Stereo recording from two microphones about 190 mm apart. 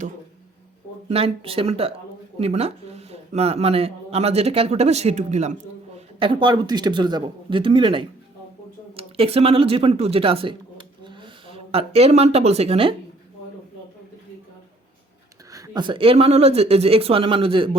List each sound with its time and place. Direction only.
1.0 s speech: 30° right (ahead or behind)
6.1 s speech: 25° right (ahead or behind)
15.5 s speech: 20° right (ahead or behind)